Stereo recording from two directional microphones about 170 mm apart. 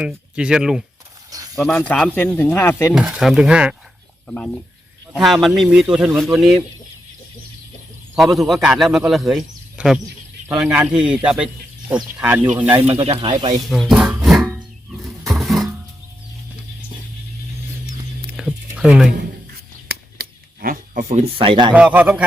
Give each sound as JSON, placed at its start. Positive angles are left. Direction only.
{"t": 0.0, "sound": "a man's voice", "side_deg": -5}
{"t": 2.9, "sound": "a man's voice", "side_deg": -5}
{"t": 5.1, "sound": "a man's voice", "side_deg": 0}
{"t": 8.1, "sound": "a man's voice", "side_deg": 0}
{"t": 13.1, "sound": "speech", "side_deg": -30}
{"t": 13.7, "sound": "music", "side_deg": 0}
{"t": 15.3, "sound": "a sound", "side_deg": 0}
{"t": 18.3, "sound": "a sound", "side_deg": -5}
{"t": 19.9, "sound": "a sound", "side_deg": -60}
{"t": 21.7, "sound": "speech", "side_deg": -5}